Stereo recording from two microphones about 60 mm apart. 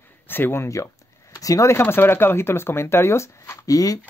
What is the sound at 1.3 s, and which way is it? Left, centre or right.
Speech, left.